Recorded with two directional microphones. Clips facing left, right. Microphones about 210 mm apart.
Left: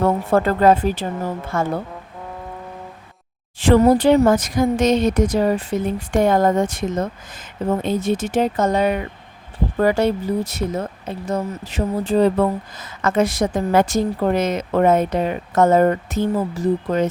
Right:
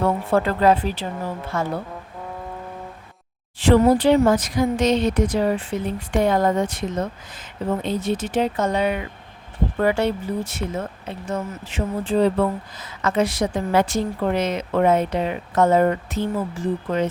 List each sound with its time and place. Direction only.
0.0 s speech: 45° left (ahead or behind)
3.6 s speech: 45° left (ahead or behind)